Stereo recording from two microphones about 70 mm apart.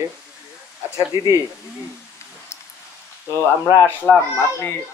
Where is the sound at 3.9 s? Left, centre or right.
Left.